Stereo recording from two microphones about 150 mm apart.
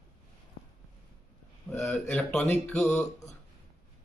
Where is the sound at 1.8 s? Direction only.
5° left (ahead or behind).